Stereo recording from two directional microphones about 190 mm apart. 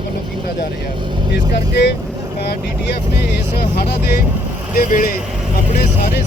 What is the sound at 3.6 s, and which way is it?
Speech, 55° left (ahead or behind).